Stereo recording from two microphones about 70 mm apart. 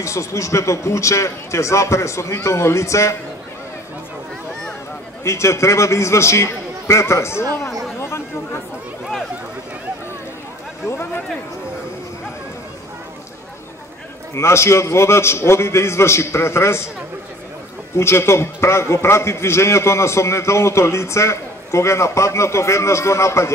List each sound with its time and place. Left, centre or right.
0.0 s a man's voice: left
5.2 s a man's voice: left
14.3 s a man's voice: left
17.9 s a man's voice: left